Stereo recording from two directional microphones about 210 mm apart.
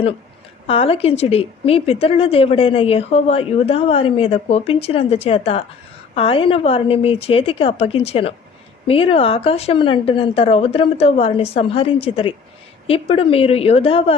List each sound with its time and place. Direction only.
0.7 s a woman's voice: 25° left (ahead or behind)